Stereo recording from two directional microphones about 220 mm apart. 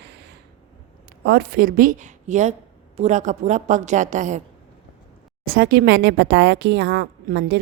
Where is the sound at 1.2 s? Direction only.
45° right (ahead or behind).